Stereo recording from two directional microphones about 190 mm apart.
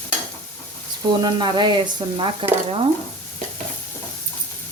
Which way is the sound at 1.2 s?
25° right (ahead or behind).